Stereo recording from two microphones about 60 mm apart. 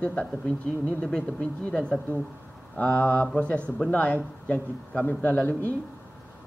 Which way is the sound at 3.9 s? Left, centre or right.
Left.